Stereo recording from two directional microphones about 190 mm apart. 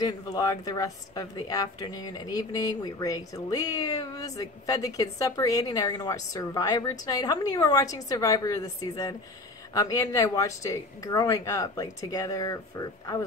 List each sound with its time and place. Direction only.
0.0 s a woman's voice: 20° left (ahead or behind)